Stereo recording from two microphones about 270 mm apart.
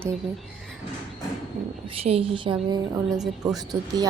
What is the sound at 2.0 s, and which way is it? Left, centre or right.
Speech, right.